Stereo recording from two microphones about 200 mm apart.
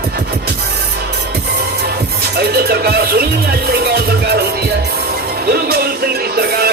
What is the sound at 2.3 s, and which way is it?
Music, 50° right (ahead or behind).